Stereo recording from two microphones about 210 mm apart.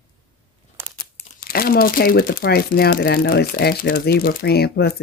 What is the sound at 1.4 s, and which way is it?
Speech, 45° left (ahead or behind).